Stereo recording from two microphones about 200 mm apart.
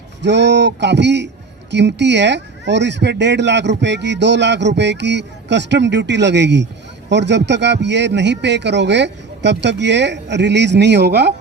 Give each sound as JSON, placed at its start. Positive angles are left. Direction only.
{"t": 0.2, "sound": "speech", "side_deg": -60}